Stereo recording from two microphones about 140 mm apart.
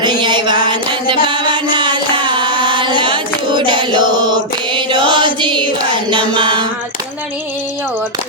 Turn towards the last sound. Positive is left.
turn(degrees=-35)  # may be behind; listen again after turning